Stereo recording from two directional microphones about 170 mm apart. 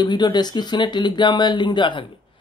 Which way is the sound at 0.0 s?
25° left (ahead or behind).